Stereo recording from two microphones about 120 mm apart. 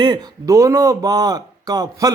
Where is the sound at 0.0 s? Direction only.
35° right (ahead or behind).